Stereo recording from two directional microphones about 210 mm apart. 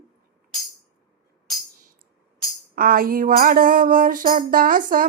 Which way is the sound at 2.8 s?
45° right (ahead or behind).